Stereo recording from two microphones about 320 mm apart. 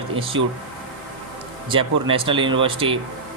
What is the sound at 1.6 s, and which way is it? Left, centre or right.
A man's voice, centre.